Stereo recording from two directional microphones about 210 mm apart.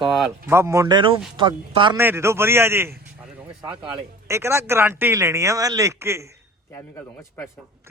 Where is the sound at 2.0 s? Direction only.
10° right (ahead or behind).